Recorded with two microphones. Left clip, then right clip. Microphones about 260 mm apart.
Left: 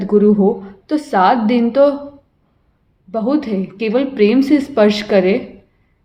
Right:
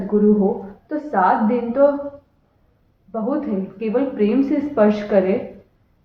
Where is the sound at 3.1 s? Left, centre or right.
Left.